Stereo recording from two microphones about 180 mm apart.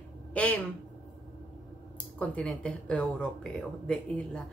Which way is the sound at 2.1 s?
5° left (ahead or behind).